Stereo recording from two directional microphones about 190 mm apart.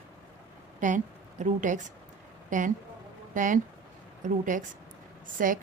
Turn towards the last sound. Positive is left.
turn(degrees=-45)  # may be behind; listen again after turning